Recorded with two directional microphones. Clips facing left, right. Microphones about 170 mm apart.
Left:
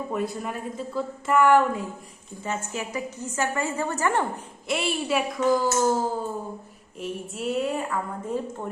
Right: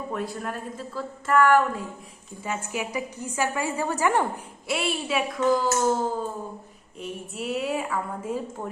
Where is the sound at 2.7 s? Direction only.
15° right (ahead or behind); by 5.9 s 10° left (ahead or behind).